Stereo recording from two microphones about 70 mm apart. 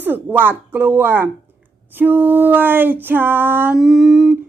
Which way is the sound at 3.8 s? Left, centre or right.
Centre.